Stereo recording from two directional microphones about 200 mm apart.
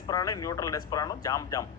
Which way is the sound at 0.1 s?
15° left (ahead or behind).